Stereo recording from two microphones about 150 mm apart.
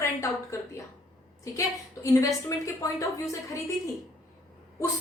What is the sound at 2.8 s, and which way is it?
Speech, 20° left (ahead or behind).